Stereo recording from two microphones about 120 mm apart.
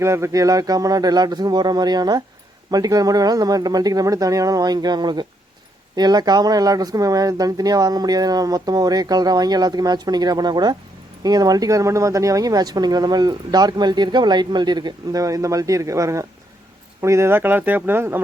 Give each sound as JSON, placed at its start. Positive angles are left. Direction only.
{"t": 0.0, "sound": "speech", "side_deg": -25}